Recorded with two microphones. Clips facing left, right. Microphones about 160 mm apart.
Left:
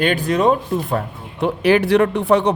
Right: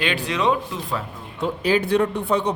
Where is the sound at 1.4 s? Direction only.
70° left (ahead or behind).